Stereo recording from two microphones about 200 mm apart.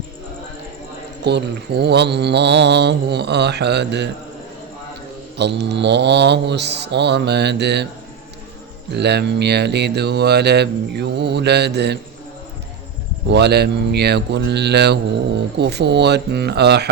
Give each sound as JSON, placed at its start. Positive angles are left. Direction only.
{"t": 1.2, "sound": "mantra", "side_deg": -55}
{"t": 5.4, "sound": "mantra", "side_deg": -60}
{"t": 8.9, "sound": "mantra", "side_deg": -55}
{"t": 13.3, "sound": "mantra", "side_deg": -55}